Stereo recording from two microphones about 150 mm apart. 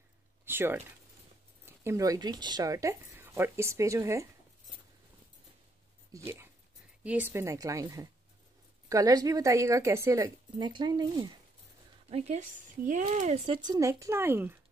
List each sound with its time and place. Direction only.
0.5 s speech: 15° right (ahead or behind)
6.1 s a woman's voice: 15° right (ahead or behind)
12.1 s speech: 45° right (ahead or behind)
13.6 s speech: 25° right (ahead or behind)